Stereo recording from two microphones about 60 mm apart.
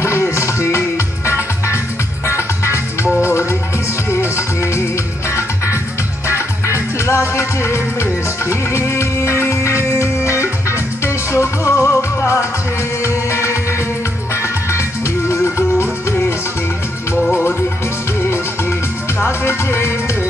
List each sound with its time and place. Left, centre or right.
0.0 s music: left
6.2 s music: left
15.2 s music: left
19.1 s music: left